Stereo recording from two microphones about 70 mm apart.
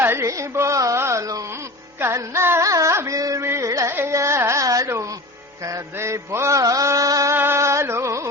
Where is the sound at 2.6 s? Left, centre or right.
Right.